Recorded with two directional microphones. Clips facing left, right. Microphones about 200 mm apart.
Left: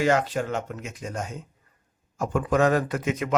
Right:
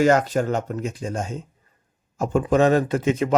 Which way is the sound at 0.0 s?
45° right (ahead or behind).